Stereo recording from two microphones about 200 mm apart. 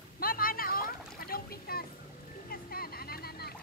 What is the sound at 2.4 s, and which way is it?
Vehicle, 50° left (ahead or behind).